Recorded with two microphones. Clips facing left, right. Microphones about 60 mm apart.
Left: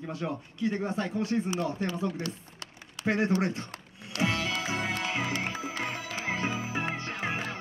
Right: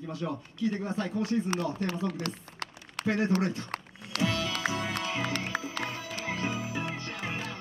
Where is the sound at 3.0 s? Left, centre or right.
Left.